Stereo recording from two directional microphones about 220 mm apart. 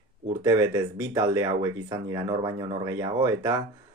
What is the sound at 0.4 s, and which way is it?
Speech, 15° right (ahead or behind).